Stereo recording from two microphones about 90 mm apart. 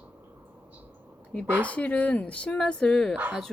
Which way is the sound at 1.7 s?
15° left (ahead or behind).